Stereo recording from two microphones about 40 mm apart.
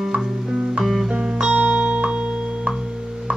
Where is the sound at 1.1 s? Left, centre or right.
Right.